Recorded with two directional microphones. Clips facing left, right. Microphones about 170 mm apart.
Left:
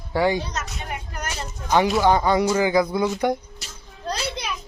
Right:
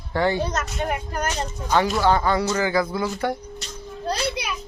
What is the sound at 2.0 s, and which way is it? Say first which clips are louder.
Speech: left 2 dB; 15° left (ahead or behind).